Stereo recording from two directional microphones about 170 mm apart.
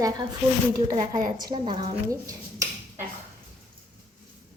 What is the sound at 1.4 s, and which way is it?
Speech, 25° right (ahead or behind).